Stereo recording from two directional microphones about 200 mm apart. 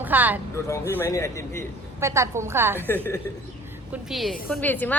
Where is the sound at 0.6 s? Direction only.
15° left (ahead or behind).